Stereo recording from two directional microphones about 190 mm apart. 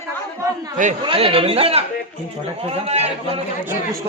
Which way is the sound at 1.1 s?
30° right (ahead or behind).